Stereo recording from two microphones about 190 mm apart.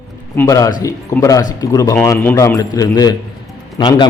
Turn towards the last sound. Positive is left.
turn(degrees=20)  # may be behind; listen again after turning